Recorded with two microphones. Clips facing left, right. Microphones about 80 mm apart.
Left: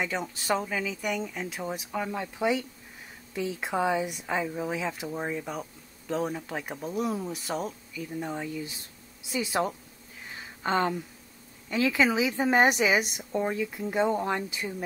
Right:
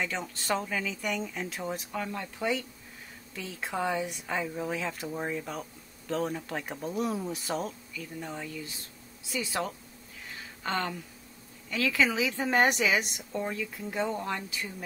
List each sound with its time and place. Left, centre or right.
0.0 s speech: centre
7.9 s a woman's voice: centre